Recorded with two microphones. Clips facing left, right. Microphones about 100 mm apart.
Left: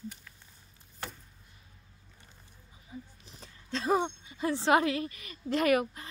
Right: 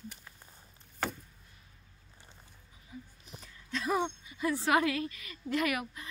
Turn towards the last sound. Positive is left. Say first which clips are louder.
# left 6 dB
turn(degrees=35)  # may be behind; listen again after turning